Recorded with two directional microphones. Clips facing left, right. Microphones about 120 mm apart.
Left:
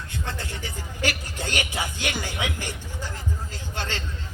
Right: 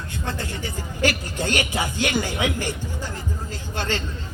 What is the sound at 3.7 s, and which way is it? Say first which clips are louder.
Speech: right 5 dB; 50° right (ahead or behind).